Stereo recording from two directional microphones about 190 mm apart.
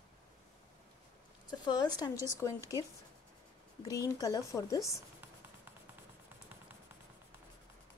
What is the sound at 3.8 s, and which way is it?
Speech, 20° left (ahead or behind).